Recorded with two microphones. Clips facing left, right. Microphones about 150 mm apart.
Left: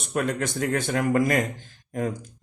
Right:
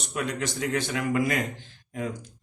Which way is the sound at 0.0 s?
50° left (ahead or behind).